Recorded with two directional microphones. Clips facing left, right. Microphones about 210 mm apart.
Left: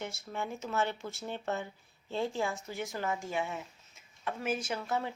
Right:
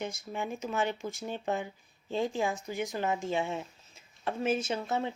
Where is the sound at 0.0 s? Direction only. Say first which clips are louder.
Right 3 dB; 15° right (ahead or behind).